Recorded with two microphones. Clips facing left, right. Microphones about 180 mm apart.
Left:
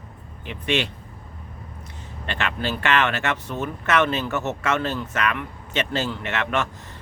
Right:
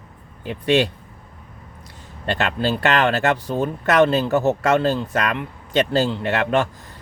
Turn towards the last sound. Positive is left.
turn(degrees=-35)  # may be behind; listen again after turning